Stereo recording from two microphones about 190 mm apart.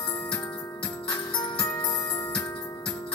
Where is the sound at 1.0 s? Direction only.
20° left (ahead or behind).